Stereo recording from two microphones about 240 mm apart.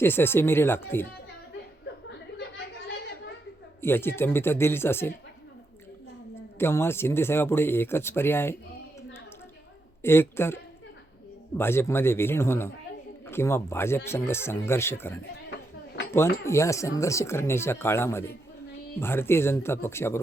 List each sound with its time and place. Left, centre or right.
0.0 s speech: centre
2.6 s chatter: left
3.8 s speech: centre
6.6 s speech: centre
10.0 s speech: centre